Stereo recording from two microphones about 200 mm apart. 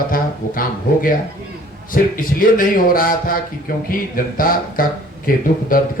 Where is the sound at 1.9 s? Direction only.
45° left (ahead or behind).